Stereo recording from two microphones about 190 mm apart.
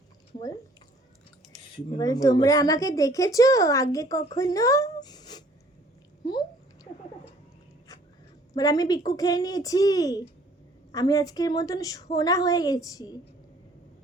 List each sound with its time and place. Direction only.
1.7 s speech: 25° left (ahead or behind)
8.5 s a woman's voice: 20° left (ahead or behind)